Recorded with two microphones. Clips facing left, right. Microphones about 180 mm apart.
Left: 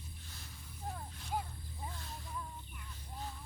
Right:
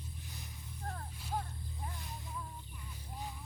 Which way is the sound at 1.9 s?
15° right (ahead or behind).